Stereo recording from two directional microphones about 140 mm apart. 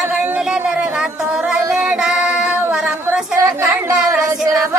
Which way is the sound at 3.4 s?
20° right (ahead or behind).